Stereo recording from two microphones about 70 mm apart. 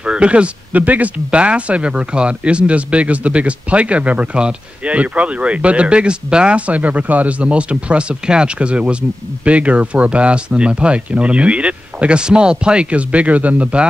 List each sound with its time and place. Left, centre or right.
0.0 s speech: centre